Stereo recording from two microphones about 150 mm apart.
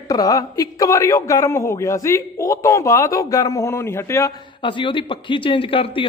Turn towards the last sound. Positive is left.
turn(degrees=35)  # may be behind; listen again after turning